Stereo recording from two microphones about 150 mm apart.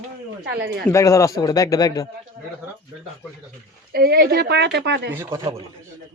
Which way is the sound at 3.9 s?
90° right.